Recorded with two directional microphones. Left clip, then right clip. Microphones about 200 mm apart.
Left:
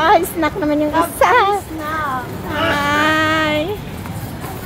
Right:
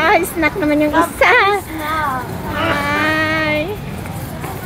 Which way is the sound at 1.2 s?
5° right (ahead or behind).